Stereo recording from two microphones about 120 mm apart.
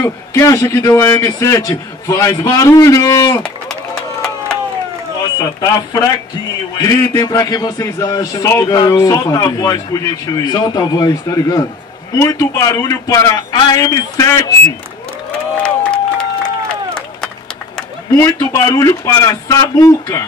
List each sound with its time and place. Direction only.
0.0 s a man's voice: 25° left (ahead or behind)
5.4 s a man's voice: 35° left (ahead or behind)
15.6 s crowd: 10° left (ahead or behind)
18.1 s a man's voice: 30° left (ahead or behind)